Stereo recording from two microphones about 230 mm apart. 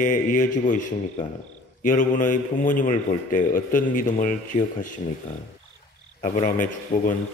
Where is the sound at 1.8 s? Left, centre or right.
Left.